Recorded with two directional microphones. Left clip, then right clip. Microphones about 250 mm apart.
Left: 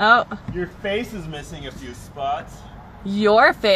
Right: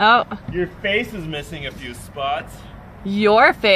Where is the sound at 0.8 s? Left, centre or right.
Right.